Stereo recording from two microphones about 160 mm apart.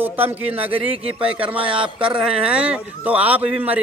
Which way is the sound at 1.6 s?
30° right (ahead or behind).